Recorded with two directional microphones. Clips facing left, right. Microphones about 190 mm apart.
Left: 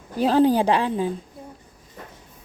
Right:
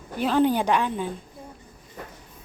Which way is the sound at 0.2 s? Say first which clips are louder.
Left 4 dB; 35° left (ahead or behind).